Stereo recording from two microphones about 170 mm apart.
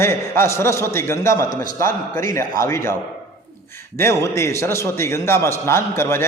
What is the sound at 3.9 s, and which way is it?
A man's voice, 15° left (ahead or behind).